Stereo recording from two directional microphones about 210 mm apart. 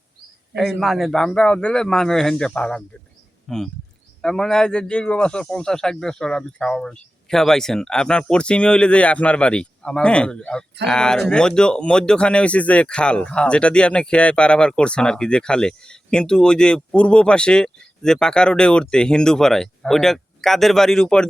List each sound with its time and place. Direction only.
0.8 s speech: centre (ahead or behind)